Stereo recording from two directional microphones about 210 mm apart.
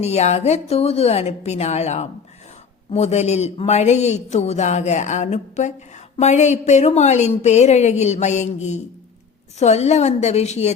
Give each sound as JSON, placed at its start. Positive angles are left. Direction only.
{"t": 0.0, "sound": "speech", "side_deg": 30}